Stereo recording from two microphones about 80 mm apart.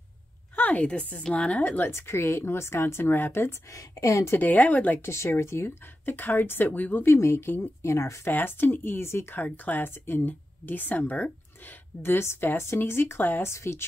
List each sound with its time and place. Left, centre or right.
0.6 s speech: centre
3.7 s a woman's voice: left
4.4 s speech: left
5.0 s speech: left
8.3 s speech: left
12.0 s speech: left